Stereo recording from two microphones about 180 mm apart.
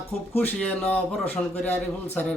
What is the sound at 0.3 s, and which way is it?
Speech, 10° left (ahead or behind).